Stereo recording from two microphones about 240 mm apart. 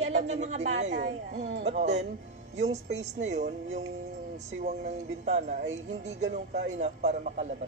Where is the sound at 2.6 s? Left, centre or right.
Right.